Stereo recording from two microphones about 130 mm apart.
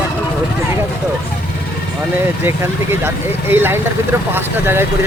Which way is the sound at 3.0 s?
15° right (ahead or behind).